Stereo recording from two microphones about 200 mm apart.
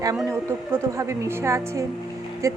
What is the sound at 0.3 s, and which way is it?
A woman's voice, 15° right (ahead or behind).